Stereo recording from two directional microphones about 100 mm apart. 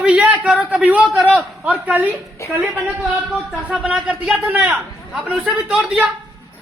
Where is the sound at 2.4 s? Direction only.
25° left (ahead or behind).